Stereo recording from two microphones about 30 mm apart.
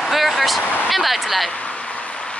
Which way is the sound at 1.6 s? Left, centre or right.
Left.